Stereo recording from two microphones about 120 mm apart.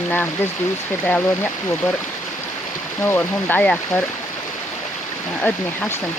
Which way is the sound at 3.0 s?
15° left (ahead or behind).